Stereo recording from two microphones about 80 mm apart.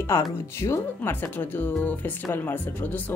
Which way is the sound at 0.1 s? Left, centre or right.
Left.